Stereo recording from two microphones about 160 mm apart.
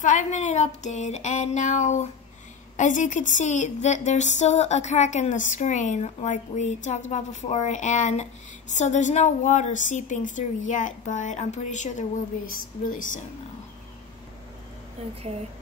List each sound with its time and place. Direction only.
0.0 s speech: 50° left (ahead or behind)
12.9 s speech: 55° left (ahead or behind)